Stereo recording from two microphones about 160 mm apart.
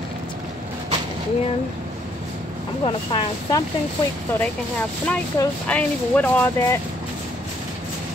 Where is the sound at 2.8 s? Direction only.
30° left (ahead or behind).